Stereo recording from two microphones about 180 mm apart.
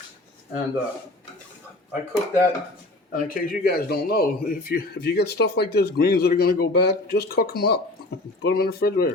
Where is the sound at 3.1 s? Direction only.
50° left (ahead or behind).